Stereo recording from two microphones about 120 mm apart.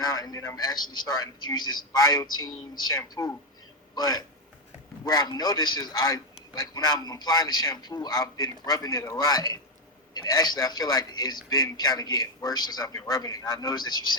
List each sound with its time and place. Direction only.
0.0 s a man's voice: 30° left (ahead or behind)